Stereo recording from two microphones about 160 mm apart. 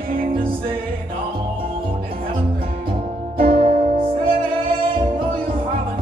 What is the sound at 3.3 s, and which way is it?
Music, 35° right (ahead or behind).